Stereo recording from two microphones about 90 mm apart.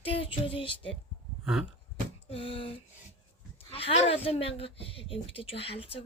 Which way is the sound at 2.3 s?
90° left.